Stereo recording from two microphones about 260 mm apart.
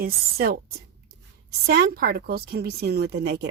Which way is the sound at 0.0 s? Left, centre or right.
Right.